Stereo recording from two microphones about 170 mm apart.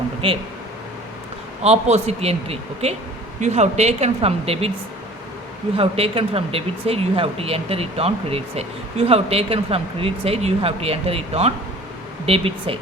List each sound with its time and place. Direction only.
0.2 s speech: 30° right (ahead or behind)
1.6 s speech: 40° right (ahead or behind)
5.7 s speech: 35° right (ahead or behind)